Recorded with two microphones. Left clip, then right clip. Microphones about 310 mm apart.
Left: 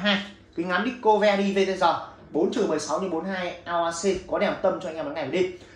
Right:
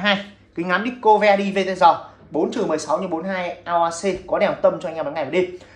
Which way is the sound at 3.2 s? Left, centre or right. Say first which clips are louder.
Right 5 dB; centre.